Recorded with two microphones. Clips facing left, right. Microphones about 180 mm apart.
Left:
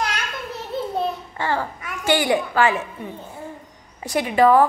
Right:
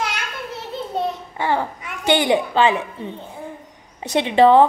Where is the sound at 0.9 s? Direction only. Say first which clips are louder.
Right 1 dB; 20° right (ahead or behind).